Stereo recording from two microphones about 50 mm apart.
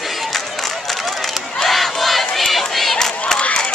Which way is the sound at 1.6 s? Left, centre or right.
Centre.